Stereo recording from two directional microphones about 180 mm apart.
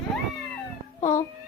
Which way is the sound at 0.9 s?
15° left (ahead or behind).